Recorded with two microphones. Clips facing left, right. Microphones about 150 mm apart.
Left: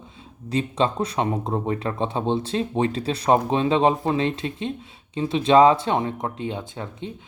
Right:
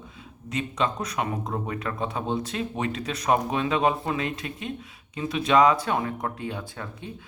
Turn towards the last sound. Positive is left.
turn(degrees=20)  # may be behind; listen again after turning